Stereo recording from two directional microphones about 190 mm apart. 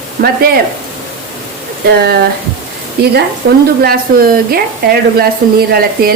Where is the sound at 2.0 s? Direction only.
60° right (ahead or behind).